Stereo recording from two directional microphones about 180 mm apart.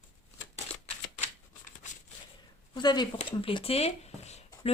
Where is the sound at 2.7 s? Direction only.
25° left (ahead or behind).